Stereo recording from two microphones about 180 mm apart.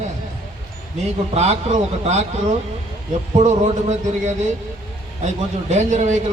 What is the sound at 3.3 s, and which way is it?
Speech, 40° right (ahead or behind).